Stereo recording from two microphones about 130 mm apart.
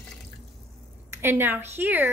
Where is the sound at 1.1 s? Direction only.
15° right (ahead or behind).